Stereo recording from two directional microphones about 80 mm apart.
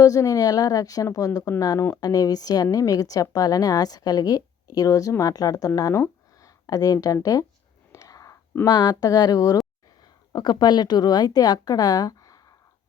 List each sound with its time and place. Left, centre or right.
0.0 s a woman's voice: left
5.9 s a sound: left
6.7 s a woman's voice: left
7.9 s whispering: left
8.6 s a woman's voice: left
10.3 s speech: left